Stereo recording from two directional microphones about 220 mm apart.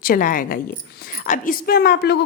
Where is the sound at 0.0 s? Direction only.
40° left (ahead or behind).